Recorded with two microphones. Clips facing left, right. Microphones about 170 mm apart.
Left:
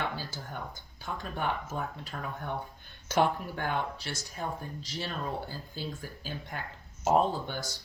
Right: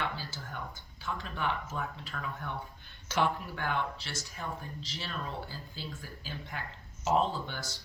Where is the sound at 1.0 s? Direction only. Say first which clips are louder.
Left 1 dB; 45° left (ahead or behind).